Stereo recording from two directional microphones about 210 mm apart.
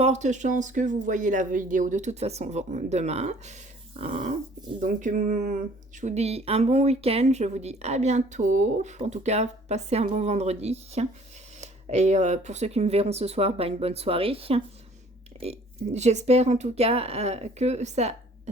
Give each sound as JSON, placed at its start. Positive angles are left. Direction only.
{"t": 0.0, "sound": "speech", "side_deg": -35}